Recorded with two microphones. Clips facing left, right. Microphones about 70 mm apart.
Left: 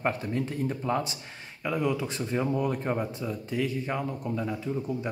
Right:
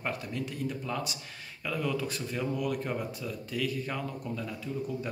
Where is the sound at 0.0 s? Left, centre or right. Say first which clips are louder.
Left 6 dB; left.